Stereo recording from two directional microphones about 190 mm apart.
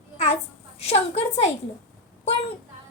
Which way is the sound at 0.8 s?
35° left (ahead or behind).